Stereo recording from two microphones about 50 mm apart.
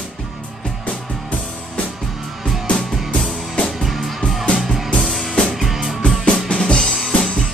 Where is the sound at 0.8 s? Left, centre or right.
Left.